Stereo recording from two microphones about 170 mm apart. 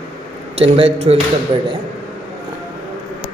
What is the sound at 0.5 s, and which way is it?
Speech, 35° right (ahead or behind).